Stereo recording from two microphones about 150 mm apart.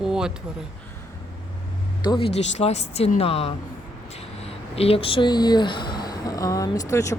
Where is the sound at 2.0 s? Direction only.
30° left (ahead or behind).